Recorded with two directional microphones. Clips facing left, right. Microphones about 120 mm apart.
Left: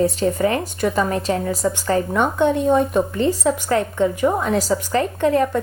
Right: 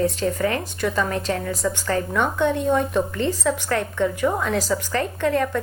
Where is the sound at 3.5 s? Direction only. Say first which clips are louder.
Left 4 dB; 20° left (ahead or behind).